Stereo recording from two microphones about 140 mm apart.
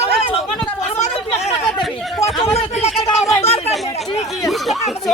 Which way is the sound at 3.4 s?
50° left (ahead or behind).